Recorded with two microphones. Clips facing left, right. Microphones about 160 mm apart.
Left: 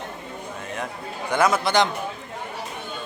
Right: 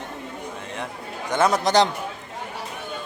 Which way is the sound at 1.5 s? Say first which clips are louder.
Right 3 dB; 35° right (ahead or behind).